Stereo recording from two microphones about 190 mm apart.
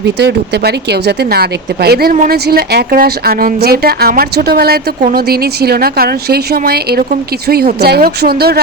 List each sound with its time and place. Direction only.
0.0 s speech: 60° right (ahead or behind)